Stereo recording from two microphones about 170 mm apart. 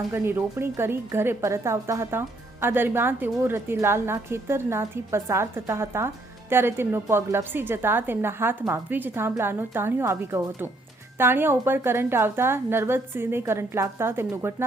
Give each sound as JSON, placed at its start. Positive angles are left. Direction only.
{"t": 0.1, "sound": "a woman's voice", "side_deg": -15}